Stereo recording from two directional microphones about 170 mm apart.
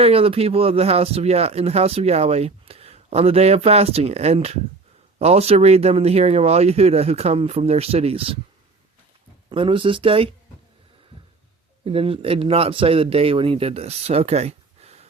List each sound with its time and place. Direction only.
0.0 s speech: 35° right (ahead or behind)
9.5 s speech: 30° right (ahead or behind)
11.9 s speech: 30° right (ahead or behind)